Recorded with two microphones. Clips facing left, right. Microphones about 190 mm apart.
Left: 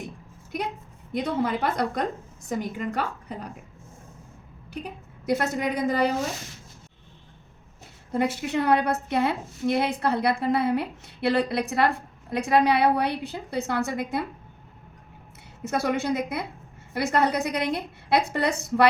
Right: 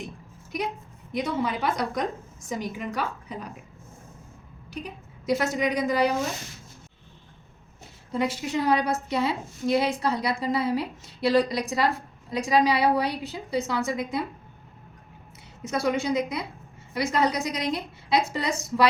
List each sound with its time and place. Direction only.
1.1 s a woman's voice: 60° left (ahead or behind)
4.7 s a woman's voice: 60° left (ahead or behind)
8.1 s a woman's voice: 60° left (ahead or behind)
15.6 s a woman's voice: 60° left (ahead or behind)